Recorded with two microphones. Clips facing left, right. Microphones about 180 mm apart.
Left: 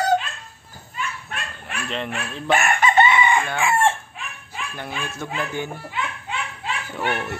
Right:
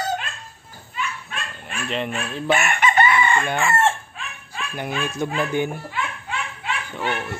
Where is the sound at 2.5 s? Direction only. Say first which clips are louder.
Left 3 dB; 35° left (ahead or behind).